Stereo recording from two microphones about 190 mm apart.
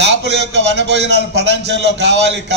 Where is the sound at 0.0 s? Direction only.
65° right (ahead or behind).